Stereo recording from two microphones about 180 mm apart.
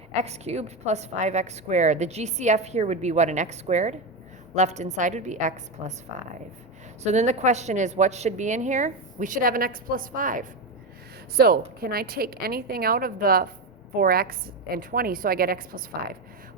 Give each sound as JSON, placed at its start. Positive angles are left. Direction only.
{"t": 0.1, "sound": "a woman's voice", "side_deg": -35}
{"t": 7.0, "sound": "a woman's voice", "side_deg": -40}